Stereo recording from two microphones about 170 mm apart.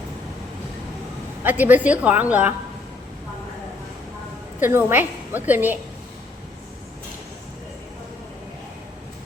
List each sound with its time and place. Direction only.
1.5 s a woman's voice: 10° right (ahead or behind)
4.6 s a woman's voice: 10° right (ahead or behind)